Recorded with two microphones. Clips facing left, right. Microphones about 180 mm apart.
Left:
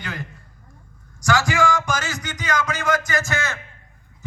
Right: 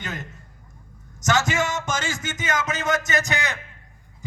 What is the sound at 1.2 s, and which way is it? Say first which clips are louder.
Speech: left 2 dB; 20° right (ahead or behind).